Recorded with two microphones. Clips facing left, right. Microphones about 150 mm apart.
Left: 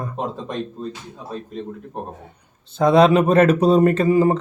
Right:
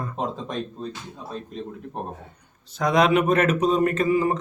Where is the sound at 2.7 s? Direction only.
30° left (ahead or behind).